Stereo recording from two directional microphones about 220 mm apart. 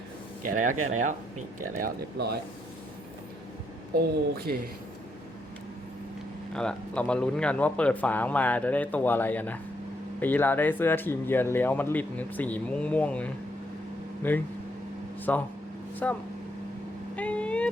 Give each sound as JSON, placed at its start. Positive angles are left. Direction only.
{"t": 0.4, "sound": "speech", "side_deg": -35}
{"t": 4.4, "sound": "speech", "side_deg": -45}
{"t": 6.5, "sound": "speech", "side_deg": 5}
{"t": 17.2, "sound": "vehicle", "side_deg": 5}